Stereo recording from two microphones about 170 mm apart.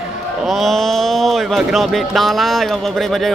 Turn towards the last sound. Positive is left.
turn(degrees=0)  # may be behind; listen again after turning